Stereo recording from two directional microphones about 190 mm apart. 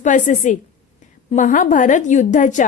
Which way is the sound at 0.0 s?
40° left (ahead or behind).